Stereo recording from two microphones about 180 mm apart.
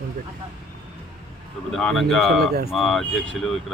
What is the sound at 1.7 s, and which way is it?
Speech, centre (ahead or behind).